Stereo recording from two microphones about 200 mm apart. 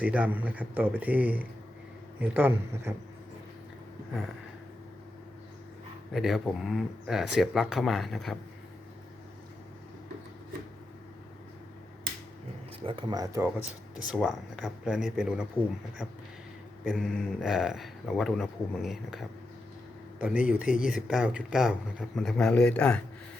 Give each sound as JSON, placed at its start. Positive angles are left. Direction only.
{"t": 0.0, "sound": "speech", "side_deg": -5}
{"t": 6.1, "sound": "speech", "side_deg": 0}
{"t": 12.8, "sound": "speech", "side_deg": -25}
{"t": 14.1, "sound": "speech", "side_deg": 0}
{"t": 16.8, "sound": "speech", "side_deg": 5}